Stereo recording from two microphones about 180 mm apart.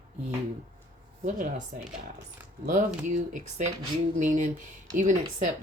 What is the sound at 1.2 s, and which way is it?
Speech, 45° right (ahead or behind).